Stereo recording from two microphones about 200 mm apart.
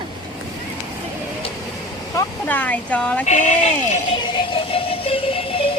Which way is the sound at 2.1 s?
10° left (ahead or behind).